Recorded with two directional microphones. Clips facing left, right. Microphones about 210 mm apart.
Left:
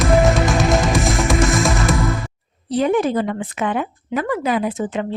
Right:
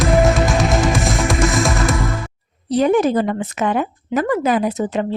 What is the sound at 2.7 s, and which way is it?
Speech, 40° right (ahead or behind).